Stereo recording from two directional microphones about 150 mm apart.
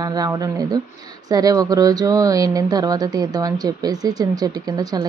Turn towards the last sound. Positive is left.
turn(degrees=-25)  # may be behind; listen again after turning